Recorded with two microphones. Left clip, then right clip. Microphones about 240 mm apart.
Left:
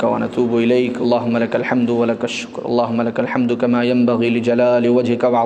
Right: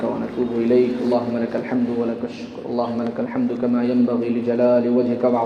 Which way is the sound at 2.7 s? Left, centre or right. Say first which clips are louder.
Left 6 dB; left.